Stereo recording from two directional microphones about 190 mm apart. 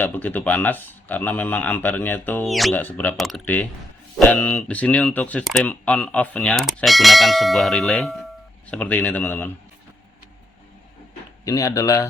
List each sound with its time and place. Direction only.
0.0 s speech: 10° left (ahead or behind)
11.4 s speech: 15° left (ahead or behind)